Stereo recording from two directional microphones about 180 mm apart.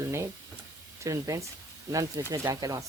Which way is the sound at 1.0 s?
15° right (ahead or behind).